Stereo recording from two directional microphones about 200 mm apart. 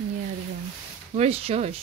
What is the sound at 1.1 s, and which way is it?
Speech, 30° right (ahead or behind).